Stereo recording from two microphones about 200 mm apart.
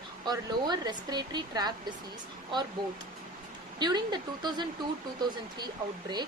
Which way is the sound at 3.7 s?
20° right (ahead or behind).